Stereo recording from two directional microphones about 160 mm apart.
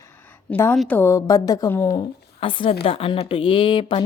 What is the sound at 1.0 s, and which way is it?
Speech, 20° left (ahead or behind).